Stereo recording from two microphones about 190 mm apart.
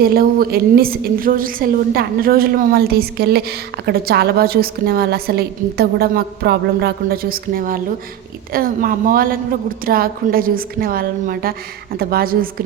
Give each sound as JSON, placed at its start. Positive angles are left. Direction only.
{"t": 0.0, "sound": "a woman's voice", "side_deg": -50}